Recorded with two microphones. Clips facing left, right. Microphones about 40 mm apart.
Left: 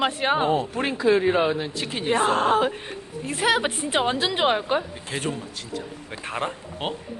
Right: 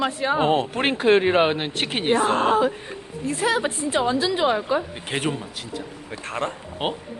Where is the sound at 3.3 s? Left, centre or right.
Left.